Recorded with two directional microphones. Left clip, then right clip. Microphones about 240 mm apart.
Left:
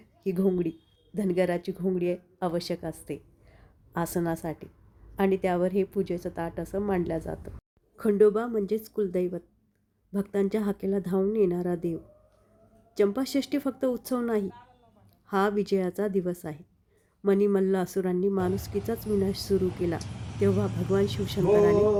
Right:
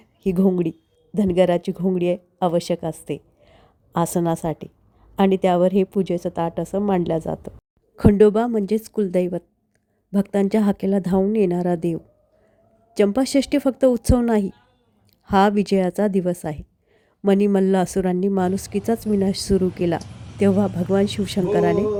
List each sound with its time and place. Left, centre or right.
0.0 s a woman's voice: right
20.0 s speech: centre
20.5 s a woman's voice: right
20.9 s speech: right
21.6 s speech: centre